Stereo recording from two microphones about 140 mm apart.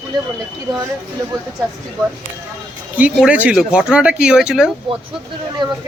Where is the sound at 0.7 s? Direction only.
25° right (ahead or behind).